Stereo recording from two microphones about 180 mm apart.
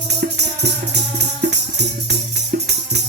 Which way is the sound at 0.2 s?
65° right (ahead or behind).